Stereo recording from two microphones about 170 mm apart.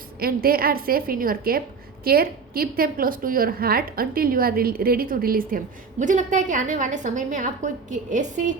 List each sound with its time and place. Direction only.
0.2 s a woman's voice: 60° right (ahead or behind)